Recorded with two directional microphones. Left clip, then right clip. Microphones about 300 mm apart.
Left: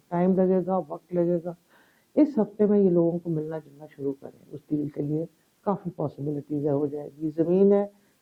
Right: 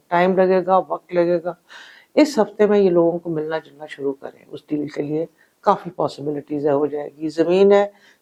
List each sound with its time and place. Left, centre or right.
0.1 s speech: centre
3.0 s speech: centre
6.1 s speech: right